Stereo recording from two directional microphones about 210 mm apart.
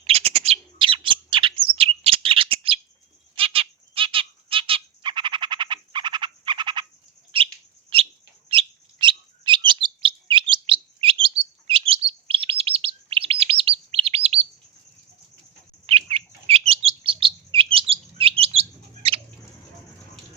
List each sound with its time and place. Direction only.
0.0 s bird: 30° right (ahead or behind)
3.3 s squawk: 25° right (ahead or behind)
7.3 s bird: 25° right (ahead or behind)
8.4 s chirp: 25° right (ahead or behind)
15.9 s chirp: 25° right (ahead or behind)
18.2 s bird: 25° right (ahead or behind)